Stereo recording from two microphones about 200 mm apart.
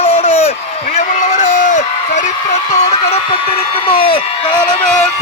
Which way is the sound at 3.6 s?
25° left (ahead or behind).